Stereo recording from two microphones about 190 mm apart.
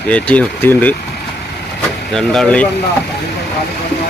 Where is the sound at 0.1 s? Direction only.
5° left (ahead or behind).